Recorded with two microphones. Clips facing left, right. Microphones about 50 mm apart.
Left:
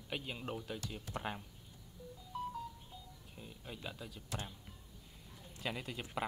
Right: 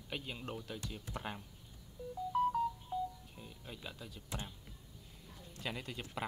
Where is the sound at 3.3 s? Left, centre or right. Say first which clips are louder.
Left 1 dB; centre.